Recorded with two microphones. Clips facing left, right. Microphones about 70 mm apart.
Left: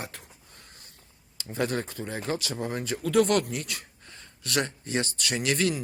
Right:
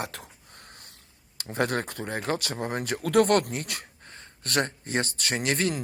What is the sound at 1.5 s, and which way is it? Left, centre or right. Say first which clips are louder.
Speech: right 2 dB; right.